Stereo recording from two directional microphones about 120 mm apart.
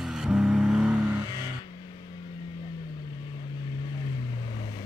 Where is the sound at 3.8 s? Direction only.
40° left (ahead or behind).